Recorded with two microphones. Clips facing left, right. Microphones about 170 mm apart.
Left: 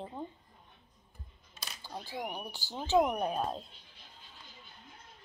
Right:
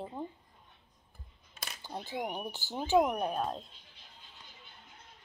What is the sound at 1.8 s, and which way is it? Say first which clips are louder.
Speech: right 2 dB; 15° right (ahead or behind).